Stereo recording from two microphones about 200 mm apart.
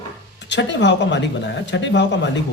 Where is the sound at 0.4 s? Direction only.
60° left (ahead or behind).